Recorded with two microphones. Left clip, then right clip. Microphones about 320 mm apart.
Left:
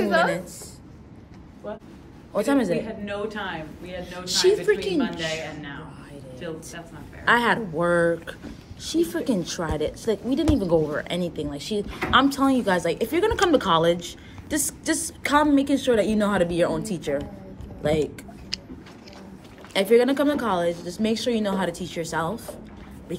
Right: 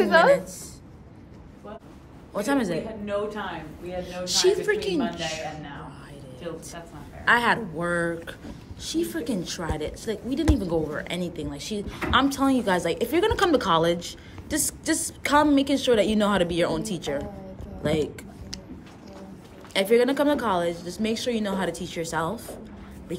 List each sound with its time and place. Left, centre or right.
0.0 s a sound: right
2.3 s a woman's voice: centre
4.0 s a woman's voice: centre
7.2 s a woman's voice: centre
19.7 s a woman's voice: centre